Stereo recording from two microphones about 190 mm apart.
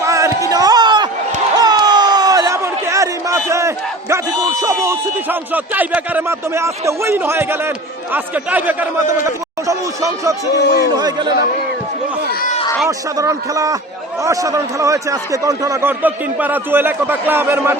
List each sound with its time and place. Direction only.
0.0 s a sound: 15° right (ahead or behind)
8.1 s a man's voice: 10° right (ahead or behind)
12.3 s speech: 50° left (ahead or behind)
13.1 s a man's voice: 15° right (ahead or behind)